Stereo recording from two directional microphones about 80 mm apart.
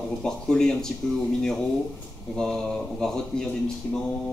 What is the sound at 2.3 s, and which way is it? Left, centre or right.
Speech, centre.